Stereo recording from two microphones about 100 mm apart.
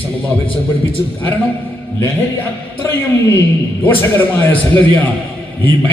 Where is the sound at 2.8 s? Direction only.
20° left (ahead or behind).